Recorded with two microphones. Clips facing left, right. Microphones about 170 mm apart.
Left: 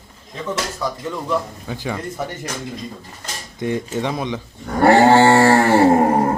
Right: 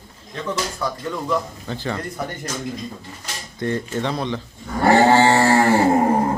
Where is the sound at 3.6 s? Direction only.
15° left (ahead or behind).